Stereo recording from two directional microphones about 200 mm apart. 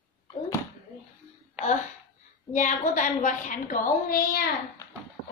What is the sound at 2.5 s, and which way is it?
A woman's voice, 40° left (ahead or behind).